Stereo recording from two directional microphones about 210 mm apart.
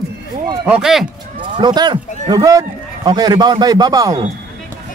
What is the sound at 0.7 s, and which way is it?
Speech, 5° right (ahead or behind).